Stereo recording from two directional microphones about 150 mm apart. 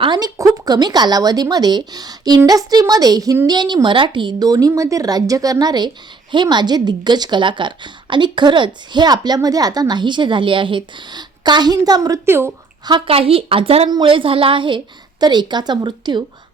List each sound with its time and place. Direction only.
0.0 s speech: 25° right (ahead or behind)
12.8 s a woman's voice: 35° right (ahead or behind)